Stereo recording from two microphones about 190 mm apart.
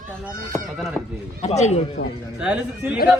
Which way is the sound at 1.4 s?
35° left (ahead or behind).